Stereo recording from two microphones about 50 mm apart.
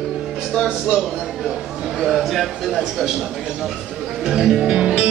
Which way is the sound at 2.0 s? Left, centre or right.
Centre.